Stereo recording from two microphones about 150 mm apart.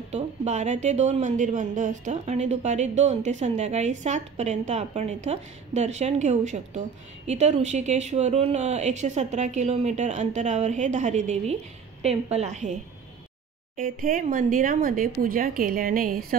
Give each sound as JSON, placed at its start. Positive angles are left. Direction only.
{"t": 0.1, "sound": "speech", "side_deg": -50}
{"t": 13.7, "sound": "speech", "side_deg": -70}